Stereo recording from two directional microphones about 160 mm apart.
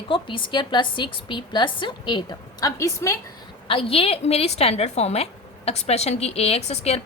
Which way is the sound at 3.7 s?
35° left (ahead or behind).